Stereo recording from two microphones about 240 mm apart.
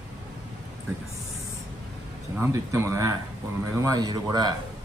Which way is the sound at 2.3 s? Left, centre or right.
Centre.